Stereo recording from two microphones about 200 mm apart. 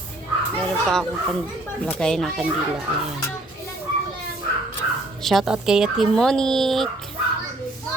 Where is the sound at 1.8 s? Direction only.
5° left (ahead or behind).